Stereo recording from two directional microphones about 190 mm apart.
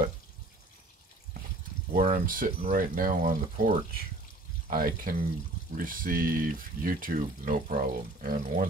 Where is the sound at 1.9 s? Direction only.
50° right (ahead or behind).